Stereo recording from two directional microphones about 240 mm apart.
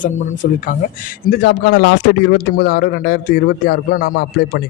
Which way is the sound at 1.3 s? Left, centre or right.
Left.